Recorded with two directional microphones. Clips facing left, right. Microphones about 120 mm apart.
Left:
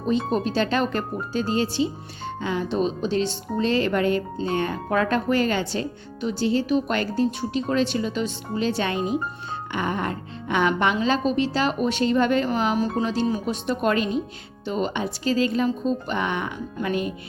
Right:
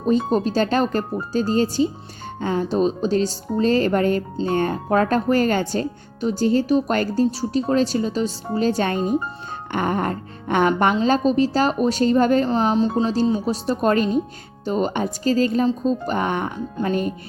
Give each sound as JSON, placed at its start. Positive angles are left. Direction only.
{"t": 0.0, "sound": "speech", "side_deg": -40}
{"t": 9.7, "sound": "music", "side_deg": -45}
{"t": 11.0, "sound": "speech", "side_deg": -40}